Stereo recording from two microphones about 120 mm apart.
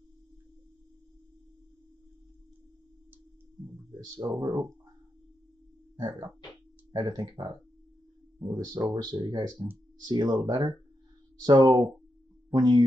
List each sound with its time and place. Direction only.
4.0 s speech: 35° right (ahead or behind)
5.9 s speech: 35° right (ahead or behind)